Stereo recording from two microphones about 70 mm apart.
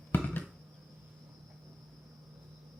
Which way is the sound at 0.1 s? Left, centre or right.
Left.